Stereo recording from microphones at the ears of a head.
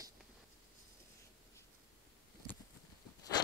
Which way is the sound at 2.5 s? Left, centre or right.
Left.